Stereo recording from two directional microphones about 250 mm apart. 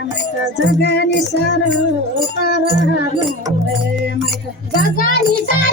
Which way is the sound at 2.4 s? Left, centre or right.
Left.